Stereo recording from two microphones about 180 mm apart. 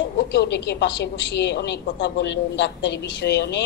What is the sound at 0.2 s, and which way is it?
A woman's voice, 70° left (ahead or behind).